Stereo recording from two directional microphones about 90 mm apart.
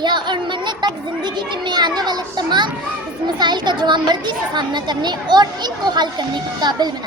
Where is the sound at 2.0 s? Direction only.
50° right (ahead or behind).